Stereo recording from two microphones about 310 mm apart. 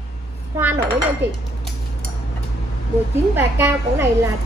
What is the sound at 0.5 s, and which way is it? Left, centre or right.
Speech, centre.